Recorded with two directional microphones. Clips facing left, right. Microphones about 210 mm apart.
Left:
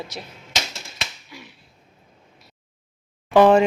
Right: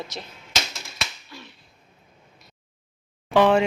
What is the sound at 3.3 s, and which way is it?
Speech, 40° left (ahead or behind).